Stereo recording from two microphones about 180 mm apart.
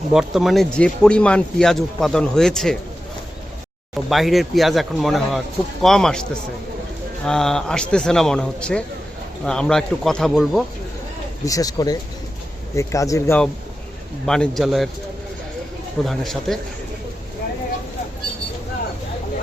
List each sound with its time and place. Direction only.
0.1 s speech: centre (ahead or behind)
3.9 s speech: centre (ahead or behind)
7.3 s speech: centre (ahead or behind)
11.4 s speech: 20° left (ahead or behind)
14.3 s speech: centre (ahead or behind)
16.0 s speech: centre (ahead or behind)